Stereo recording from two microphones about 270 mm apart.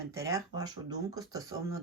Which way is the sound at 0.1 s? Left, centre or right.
Centre.